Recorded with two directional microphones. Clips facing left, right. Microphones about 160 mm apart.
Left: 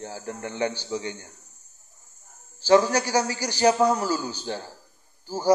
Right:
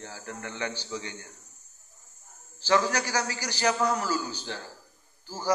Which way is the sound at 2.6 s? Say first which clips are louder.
Left 6 dB; 20° left (ahead or behind).